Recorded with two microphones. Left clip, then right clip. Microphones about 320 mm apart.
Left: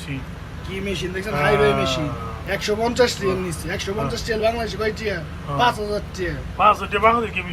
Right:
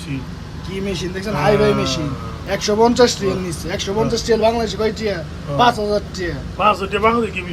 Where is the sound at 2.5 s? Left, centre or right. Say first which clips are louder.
Right 7 dB; centre.